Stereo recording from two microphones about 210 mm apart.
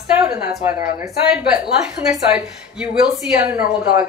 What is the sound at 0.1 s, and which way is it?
A woman's voice, 5° right (ahead or behind).